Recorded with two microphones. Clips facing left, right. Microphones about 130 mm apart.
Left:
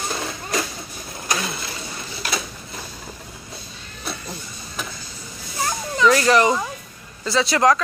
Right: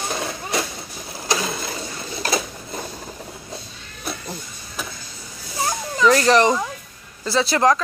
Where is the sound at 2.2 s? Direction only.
35° right (ahead or behind).